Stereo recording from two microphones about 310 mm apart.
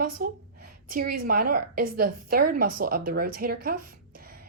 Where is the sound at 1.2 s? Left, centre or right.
Right.